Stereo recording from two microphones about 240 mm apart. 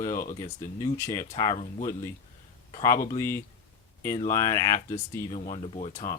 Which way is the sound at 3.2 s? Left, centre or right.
Centre.